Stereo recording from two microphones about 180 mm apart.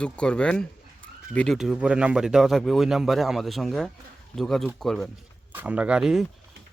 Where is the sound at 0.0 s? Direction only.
5° left (ahead or behind).